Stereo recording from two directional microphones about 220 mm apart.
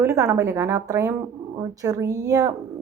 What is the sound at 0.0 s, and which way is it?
Speech, 15° right (ahead or behind).